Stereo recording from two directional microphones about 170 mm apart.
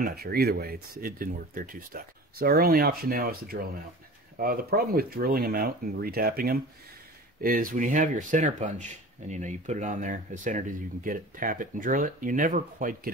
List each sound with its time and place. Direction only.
0.0 s speech: 65° right (ahead or behind)